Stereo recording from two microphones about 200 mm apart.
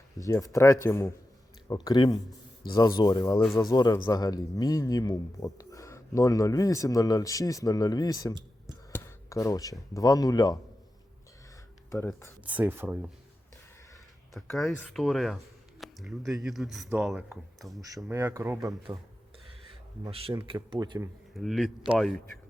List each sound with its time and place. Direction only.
0.2 s a man's voice: 15° left (ahead or behind)
11.9 s speech: 15° left (ahead or behind)
12.5 s speech: 10° right (ahead or behind)
14.4 s speech: 5° left (ahead or behind)
15.8 s a sound: centre (ahead or behind)
16.4 s speech: centre (ahead or behind)
17.8 s speech: 15° right (ahead or behind)
20.1 s speech: 30° right (ahead or behind)
21.3 s speech: centre (ahead or behind)